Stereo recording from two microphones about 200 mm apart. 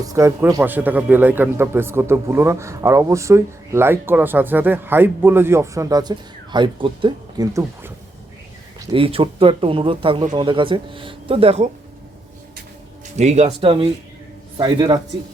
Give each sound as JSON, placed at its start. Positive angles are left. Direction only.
{"t": 0.0, "sound": "speech", "side_deg": -15}
{"t": 8.9, "sound": "speech", "side_deg": -25}
{"t": 13.1, "sound": "speech", "side_deg": -35}